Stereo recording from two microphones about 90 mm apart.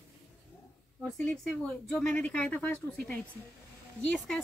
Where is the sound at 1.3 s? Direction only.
10° left (ahead or behind).